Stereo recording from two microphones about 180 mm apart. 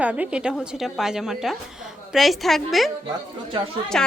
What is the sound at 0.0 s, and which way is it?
Speech, 10° right (ahead or behind).